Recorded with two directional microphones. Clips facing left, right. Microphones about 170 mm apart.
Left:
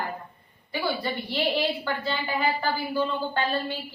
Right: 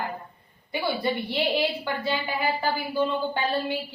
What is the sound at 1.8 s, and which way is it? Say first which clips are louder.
A woman's voice: right 1 dB; 10° right (ahead or behind).